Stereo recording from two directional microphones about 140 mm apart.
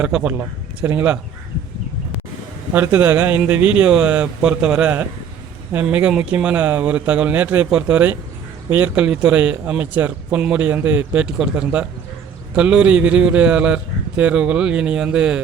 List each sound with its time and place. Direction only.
0.0 s a man's voice: 10° right (ahead or behind)
2.7 s a man's voice: 15° right (ahead or behind)